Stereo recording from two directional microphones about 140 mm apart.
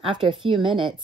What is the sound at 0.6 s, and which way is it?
Speech, 35° right (ahead or behind).